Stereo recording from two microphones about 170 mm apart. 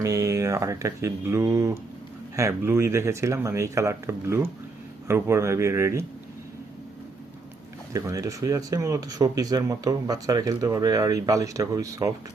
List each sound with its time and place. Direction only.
0.0 s speech: 20° right (ahead or behind)
7.9 s speech: 20° right (ahead or behind)